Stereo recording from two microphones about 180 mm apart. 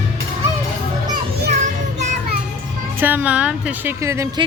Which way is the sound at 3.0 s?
10° right (ahead or behind).